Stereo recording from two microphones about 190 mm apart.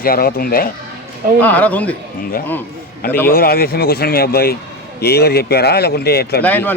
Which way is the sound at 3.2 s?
50° left (ahead or behind).